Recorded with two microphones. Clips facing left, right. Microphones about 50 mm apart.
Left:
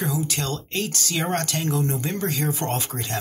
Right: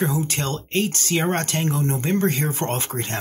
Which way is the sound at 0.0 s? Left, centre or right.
Right.